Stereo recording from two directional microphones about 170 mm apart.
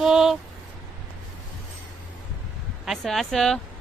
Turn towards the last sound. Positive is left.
turn(degrees=0)  # may be behind; listen again after turning